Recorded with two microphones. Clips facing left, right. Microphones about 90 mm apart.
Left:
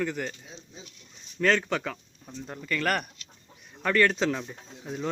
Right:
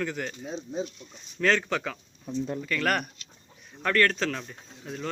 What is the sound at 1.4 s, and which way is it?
Speech, centre (ahead or behind).